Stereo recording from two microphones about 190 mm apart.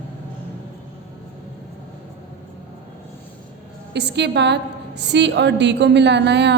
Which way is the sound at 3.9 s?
65° right (ahead or behind).